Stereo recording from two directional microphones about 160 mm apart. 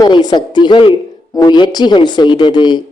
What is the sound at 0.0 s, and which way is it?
A woman's voice, 25° left (ahead or behind).